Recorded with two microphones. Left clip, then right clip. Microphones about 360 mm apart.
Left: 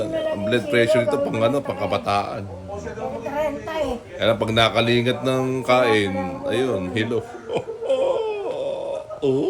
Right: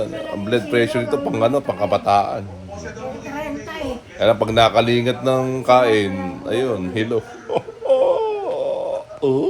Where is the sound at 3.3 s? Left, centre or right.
Centre.